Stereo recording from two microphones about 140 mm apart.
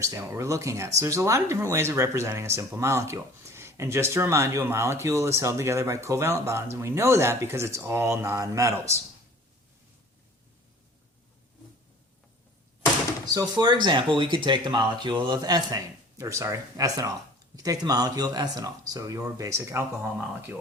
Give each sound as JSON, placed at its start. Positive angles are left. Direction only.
{"t": 0.0, "sound": "speech", "side_deg": -20}
{"t": 13.3, "sound": "speech", "side_deg": -30}